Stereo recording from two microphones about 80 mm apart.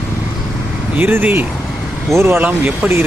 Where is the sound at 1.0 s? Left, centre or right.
Right.